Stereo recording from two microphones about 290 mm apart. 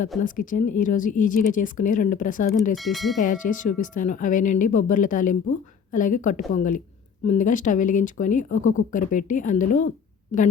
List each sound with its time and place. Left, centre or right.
0.2 s a woman's voice: left
2.7 s speech: centre
3.2 s a woman's voice: left